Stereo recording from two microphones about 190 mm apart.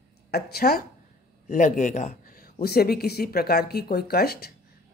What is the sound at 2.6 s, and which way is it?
Speech, 55° left (ahead or behind).